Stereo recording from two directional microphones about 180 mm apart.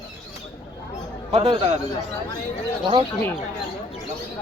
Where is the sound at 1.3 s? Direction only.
35° right (ahead or behind).